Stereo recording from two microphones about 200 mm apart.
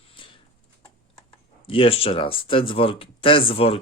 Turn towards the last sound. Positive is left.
turn(degrees=30)  # may be behind; listen again after turning